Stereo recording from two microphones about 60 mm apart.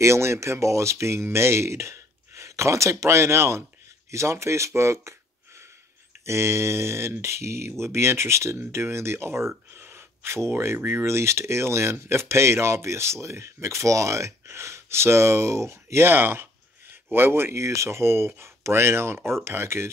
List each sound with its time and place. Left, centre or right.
0.0 s speech: right
6.2 s speech: right